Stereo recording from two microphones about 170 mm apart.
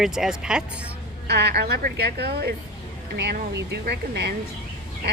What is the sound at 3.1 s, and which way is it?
A woman's voice, 80° right.